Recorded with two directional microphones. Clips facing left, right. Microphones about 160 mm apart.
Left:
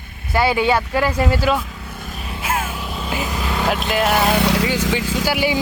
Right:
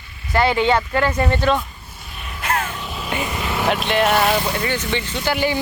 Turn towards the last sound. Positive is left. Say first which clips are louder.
# left 1 dB
turn(degrees=5)  # may be behind; listen again after turning